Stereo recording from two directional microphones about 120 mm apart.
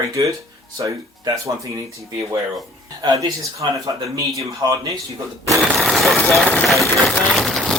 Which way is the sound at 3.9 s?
35° right (ahead or behind).